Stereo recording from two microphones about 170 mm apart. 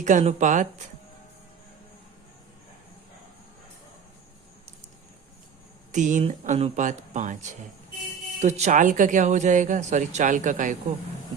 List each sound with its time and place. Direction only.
0.0 s speech: 45° right (ahead or behind)
5.9 s speech: 45° right (ahead or behind)
8.4 s speech: 40° right (ahead or behind)